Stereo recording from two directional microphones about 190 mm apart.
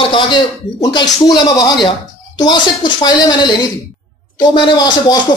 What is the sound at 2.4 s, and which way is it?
Speech, 20° left (ahead or behind).